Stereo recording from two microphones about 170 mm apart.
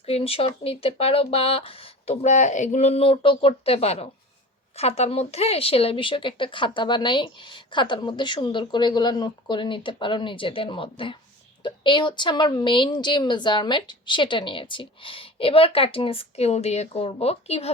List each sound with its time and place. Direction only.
0.0 s speech: 35° left (ahead or behind)